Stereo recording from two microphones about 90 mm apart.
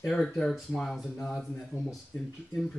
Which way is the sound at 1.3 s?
10° left (ahead or behind).